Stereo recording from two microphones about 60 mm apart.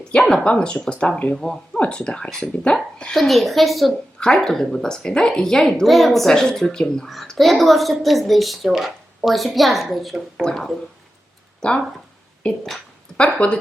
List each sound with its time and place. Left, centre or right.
0.2 s a woman's voice: centre
1.4 s a woman's voice: centre
7.3 s a woman's voice: centre
10.4 s a woman's voice: centre